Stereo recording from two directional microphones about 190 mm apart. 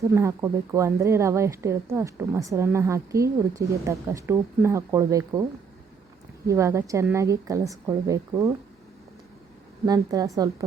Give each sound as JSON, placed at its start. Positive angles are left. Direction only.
{"t": 0.0, "sound": "speech", "side_deg": -15}
{"t": 6.5, "sound": "speech", "side_deg": -15}
{"t": 9.8, "sound": "a woman's voice", "side_deg": -20}